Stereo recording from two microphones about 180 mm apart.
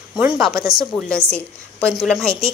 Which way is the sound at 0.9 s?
5° left (ahead or behind).